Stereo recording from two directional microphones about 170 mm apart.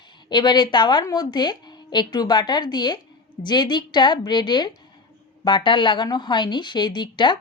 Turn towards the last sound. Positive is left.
turn(degrees=25)  # may be behind; listen again after turning